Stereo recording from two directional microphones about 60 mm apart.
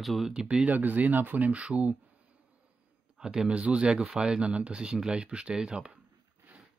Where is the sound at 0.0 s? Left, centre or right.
Centre.